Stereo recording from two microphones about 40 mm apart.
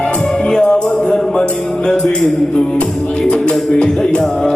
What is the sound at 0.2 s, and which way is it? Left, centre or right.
Music, centre.